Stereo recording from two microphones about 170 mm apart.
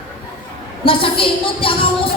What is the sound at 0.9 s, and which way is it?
Speech, 30° left (ahead or behind).